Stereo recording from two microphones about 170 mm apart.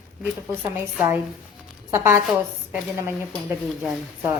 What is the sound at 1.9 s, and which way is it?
Speech, 15° right (ahead or behind).